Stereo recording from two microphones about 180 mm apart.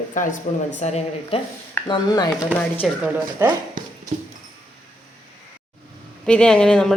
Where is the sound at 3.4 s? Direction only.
15° right (ahead or behind).